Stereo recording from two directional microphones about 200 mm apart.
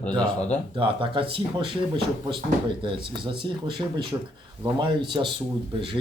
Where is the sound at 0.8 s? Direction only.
25° right (ahead or behind).